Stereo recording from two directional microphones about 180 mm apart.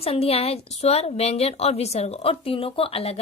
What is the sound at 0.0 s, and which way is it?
A woman's voice, 35° left (ahead or behind).